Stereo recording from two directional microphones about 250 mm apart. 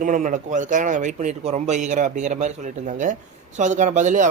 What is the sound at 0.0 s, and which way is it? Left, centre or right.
Speech, right.